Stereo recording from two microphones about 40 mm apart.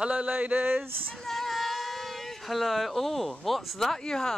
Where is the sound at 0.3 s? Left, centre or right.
Right.